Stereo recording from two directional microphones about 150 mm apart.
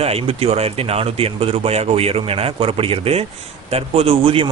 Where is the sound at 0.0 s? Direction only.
40° right (ahead or behind).